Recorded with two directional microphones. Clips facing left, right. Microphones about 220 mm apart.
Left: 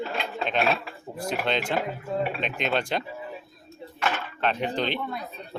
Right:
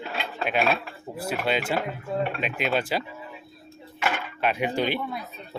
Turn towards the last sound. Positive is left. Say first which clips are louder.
# even
turn(degrees=-5)  # may be behind; listen again after turning